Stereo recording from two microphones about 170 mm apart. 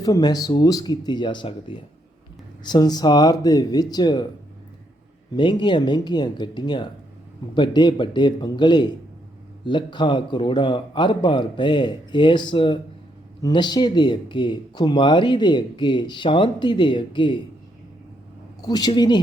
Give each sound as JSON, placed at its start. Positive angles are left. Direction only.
{"t": 0.0, "sound": "speech", "side_deg": 25}
{"t": 5.3, "sound": "speech", "side_deg": 30}
{"t": 18.6, "sound": "speech", "side_deg": 25}